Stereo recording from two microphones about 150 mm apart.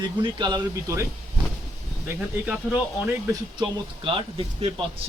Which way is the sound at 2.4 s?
10° right (ahead or behind).